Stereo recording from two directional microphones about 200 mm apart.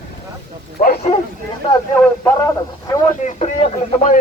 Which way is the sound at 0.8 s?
30° left (ahead or behind).